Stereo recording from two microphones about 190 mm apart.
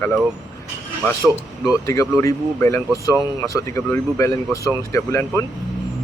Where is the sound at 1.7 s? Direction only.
15° left (ahead or behind).